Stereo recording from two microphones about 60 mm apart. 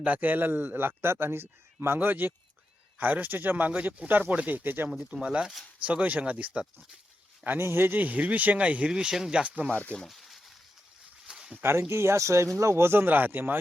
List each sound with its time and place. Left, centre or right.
0.0 s a man's voice: right
5.1 s speech: centre
5.8 s speech: right
7.6 s a man's voice: right
7.9 s speech: right; by 9.4 s centre
9.4 s speech: right
10.1 s a sound: centre
11.3 s a sound: centre
11.5 s a man's voice: right